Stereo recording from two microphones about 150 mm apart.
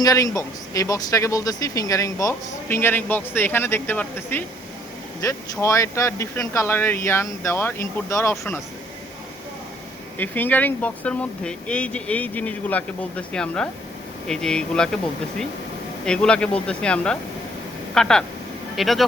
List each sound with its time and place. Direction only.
0.0 s speech: 25° left (ahead or behind)
10.2 s speech: 10° left (ahead or behind)
16.0 s speech: 5° left (ahead or behind)